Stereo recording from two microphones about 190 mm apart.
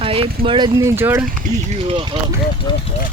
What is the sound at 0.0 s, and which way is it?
Speech, 30° right (ahead or behind).